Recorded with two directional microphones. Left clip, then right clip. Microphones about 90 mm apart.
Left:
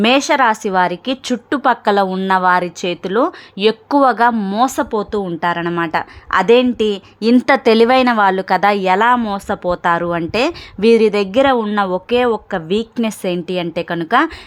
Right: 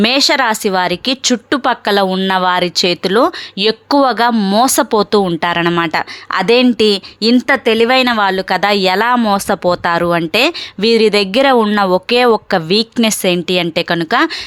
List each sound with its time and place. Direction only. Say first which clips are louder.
0.0 s a woman's voice: right 1 dB; 15° right (ahead or behind)
2.8 s speech: right 5 dB; 25° right (ahead or behind)
4.7 s speech: right 7 dB; 45° right (ahead or behind)
5.3 s speech: right 4 dB; 25° right (ahead or behind)
5.9 s a woman's voice: even; 15° right (ahead or behind)
7.2 s a woman's voice: left 1 dB; centre (ahead or behind)
7.4 s speech: left 2 dB; 20° left (ahead or behind)
8.1 s a woman's voice: even; 5° left (ahead or behind)
8.8 s a woman's voice: even; 15° right (ahead or behind)
9.1 s speech: right 5 dB; 30° right (ahead or behind)
9.8 s a woman's voice: right 3 dB; 15° right (ahead or behind)
11.4 s a woman's voice: right 4 dB; 30° right (ahead or behind); by 14.3 s 15° right (ahead or behind)